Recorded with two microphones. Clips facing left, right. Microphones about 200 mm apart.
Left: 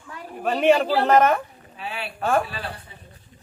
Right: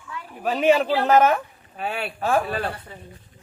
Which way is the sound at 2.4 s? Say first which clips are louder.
Right 7 dB; 50° right (ahead or behind).